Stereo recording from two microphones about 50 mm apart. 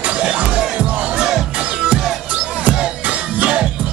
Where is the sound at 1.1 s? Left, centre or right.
Centre.